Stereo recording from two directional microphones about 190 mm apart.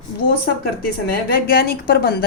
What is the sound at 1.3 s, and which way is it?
Speech, 55° left (ahead or behind).